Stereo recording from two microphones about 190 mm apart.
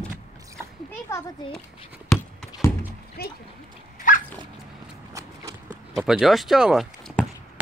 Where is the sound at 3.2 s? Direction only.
55° left (ahead or behind).